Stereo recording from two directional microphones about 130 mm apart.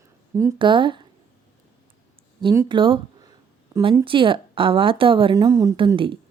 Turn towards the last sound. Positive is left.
turn(degrees=-40)  # may be behind; listen again after turning